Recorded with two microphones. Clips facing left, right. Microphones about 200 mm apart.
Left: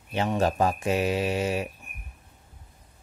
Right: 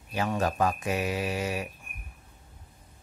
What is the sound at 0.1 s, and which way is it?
Speech, 25° left (ahead or behind).